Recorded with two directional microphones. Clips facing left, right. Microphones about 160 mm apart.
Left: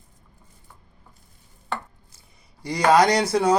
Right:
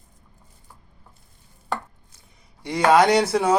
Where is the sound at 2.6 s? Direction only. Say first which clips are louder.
Right 1 dB; centre (ahead or behind).